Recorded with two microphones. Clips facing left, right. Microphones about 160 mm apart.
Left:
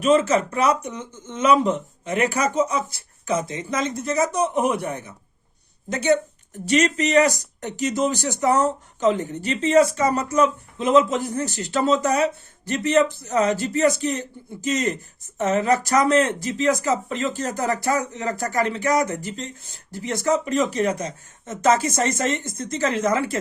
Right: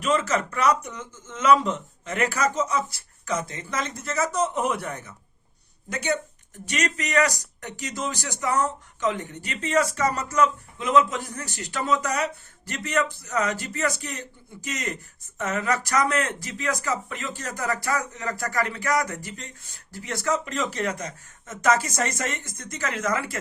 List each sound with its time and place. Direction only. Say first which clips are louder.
0.3 s a man's voice: left 3 dB; 20° left (ahead or behind)